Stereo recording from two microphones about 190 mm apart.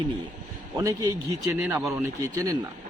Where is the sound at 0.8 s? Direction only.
15° right (ahead or behind).